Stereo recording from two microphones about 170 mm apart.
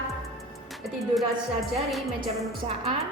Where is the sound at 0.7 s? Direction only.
Centre (ahead or behind).